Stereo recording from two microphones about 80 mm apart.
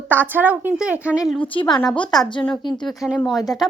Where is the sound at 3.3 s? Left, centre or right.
Left.